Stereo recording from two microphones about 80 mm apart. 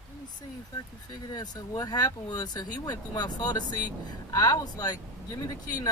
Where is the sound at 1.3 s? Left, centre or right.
Left.